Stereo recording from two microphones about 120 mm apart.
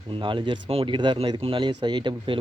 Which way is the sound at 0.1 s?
45° right (ahead or behind).